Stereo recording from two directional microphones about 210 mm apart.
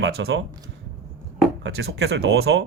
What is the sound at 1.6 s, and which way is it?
Speech, 50° right (ahead or behind).